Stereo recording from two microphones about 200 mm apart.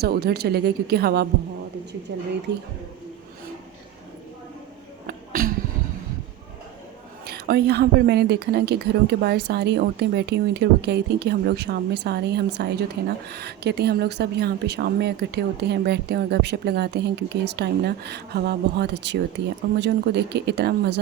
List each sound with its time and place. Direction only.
0.0 s speech: 50° right (ahead or behind)
2.5 s a woman's voice: 60° right (ahead or behind)
5.0 s a sound: 45° right (ahead or behind)
7.3 s a woman's voice: 55° right (ahead or behind)